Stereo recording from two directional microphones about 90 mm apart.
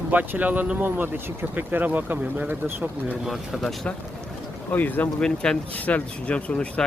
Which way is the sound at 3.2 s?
Centre (ahead or behind).